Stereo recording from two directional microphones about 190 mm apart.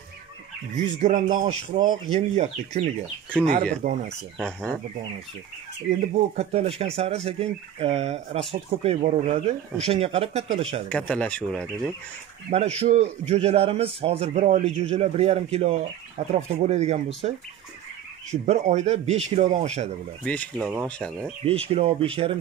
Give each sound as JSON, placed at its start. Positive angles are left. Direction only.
{"t": 0.7, "sound": "a man's voice", "side_deg": -35}
{"t": 4.4, "sound": "speech", "side_deg": 5}
{"t": 5.9, "sound": "a man's voice", "side_deg": -35}
{"t": 10.9, "sound": "speech", "side_deg": 5}
{"t": 12.4, "sound": "a man's voice", "side_deg": -35}
{"t": 20.8, "sound": "speech", "side_deg": 5}
{"t": 21.5, "sound": "a man's voice", "side_deg": -30}